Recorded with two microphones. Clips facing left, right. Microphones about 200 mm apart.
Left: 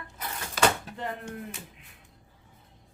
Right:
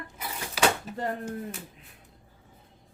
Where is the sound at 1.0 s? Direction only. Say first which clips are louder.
Right 4 dB; 40° right (ahead or behind).